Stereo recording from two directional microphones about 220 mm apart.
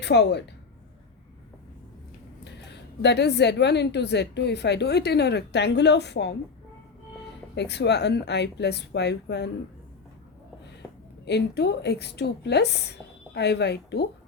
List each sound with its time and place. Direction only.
0.0 s a woman's voice: 50° left (ahead or behind)
2.4 s a woman's voice: 50° left (ahead or behind)
7.5 s a woman's voice: 50° left (ahead or behind)
11.3 s a woman's voice: 50° left (ahead or behind)